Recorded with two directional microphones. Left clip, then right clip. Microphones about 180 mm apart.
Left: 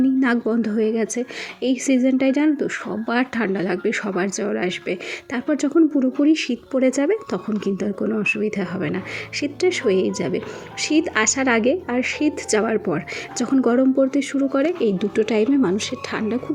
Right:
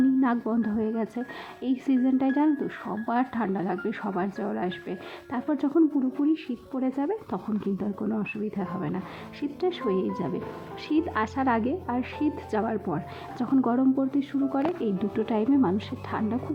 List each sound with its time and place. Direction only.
0.2 s speech: 15° left (ahead or behind)
6.0 s speech: 20° left (ahead or behind)